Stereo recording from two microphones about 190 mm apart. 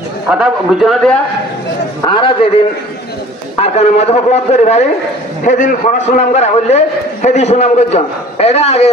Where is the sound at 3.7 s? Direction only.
35° left (ahead or behind).